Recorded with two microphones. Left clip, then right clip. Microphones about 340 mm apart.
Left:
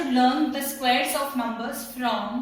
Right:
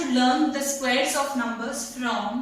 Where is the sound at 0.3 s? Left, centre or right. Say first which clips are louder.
Right 2 dB; centre.